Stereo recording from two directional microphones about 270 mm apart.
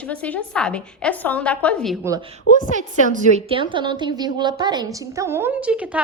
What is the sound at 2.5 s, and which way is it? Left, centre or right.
Speech, left.